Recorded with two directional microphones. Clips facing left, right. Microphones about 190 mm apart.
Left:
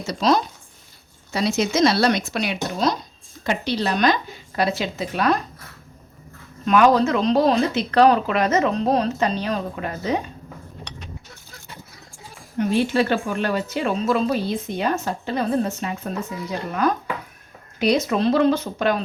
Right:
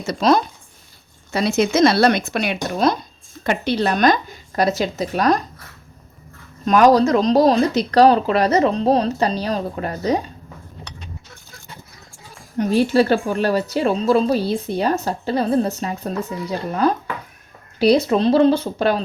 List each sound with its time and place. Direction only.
0.1 s a woman's voice: 55° right (ahead or behind); by 5.4 s 40° right (ahead or behind)
6.7 s speech: 40° right (ahead or behind)
12.5 s speech: 40° right (ahead or behind)